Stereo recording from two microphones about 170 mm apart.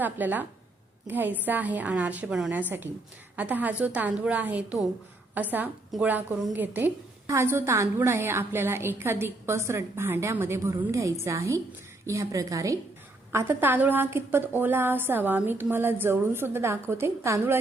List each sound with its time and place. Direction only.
0.0 s a woman's voice: 10° right (ahead or behind)